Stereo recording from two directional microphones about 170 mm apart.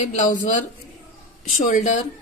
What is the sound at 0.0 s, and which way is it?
Speech, 45° left (ahead or behind).